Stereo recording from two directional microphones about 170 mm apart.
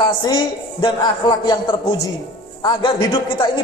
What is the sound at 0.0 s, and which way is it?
A man's voice, 25° left (ahead or behind).